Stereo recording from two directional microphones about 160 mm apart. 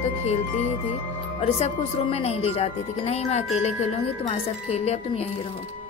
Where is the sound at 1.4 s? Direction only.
35° left (ahead or behind).